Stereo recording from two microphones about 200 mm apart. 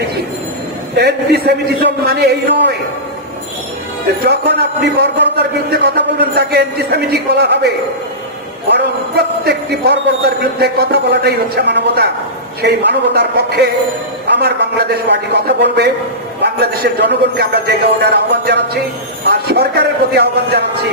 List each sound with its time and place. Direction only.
0.9 s a man's voice: 55° right (ahead or behind)
4.2 s a man's voice: 55° right (ahead or behind)